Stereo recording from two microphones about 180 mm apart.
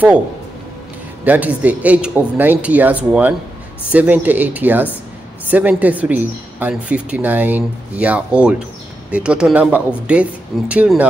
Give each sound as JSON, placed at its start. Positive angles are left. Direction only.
{"t": 1.2, "sound": "a woman's voice", "side_deg": -10}